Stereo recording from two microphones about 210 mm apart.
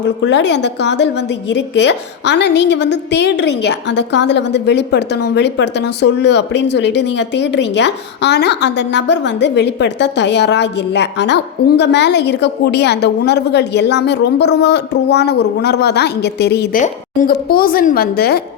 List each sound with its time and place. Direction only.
0.2 s a woman's voice: 55° left (ahead or behind)
16.8 s a woman's voice: 40° left (ahead or behind)